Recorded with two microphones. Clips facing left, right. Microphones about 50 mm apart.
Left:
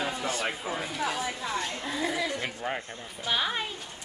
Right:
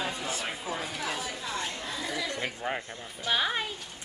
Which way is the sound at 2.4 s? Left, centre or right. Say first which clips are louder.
Even; centre.